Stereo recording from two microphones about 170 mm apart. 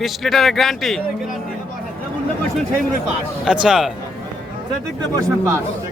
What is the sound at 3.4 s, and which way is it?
Speech, 5° right (ahead or behind).